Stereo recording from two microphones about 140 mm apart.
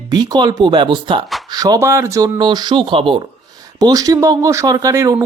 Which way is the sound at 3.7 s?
25° right (ahead or behind).